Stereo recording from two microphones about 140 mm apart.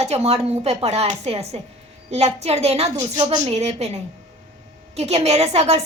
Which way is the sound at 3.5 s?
50° right (ahead or behind).